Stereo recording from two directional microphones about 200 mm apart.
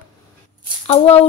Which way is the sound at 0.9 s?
30° left (ahead or behind).